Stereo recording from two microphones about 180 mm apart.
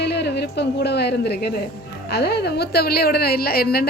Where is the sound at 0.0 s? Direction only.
65° left (ahead or behind).